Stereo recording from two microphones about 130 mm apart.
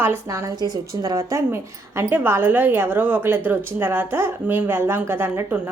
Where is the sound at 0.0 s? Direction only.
20° right (ahead or behind).